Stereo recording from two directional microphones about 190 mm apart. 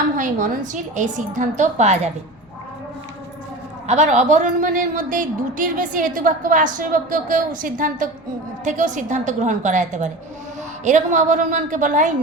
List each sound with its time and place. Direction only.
0.2 s a woman's voice: 45° right (ahead or behind)
3.8 s a woman's voice: 35° right (ahead or behind)